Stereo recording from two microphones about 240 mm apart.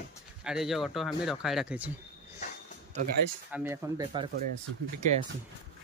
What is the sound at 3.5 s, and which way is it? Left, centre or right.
Speech, centre.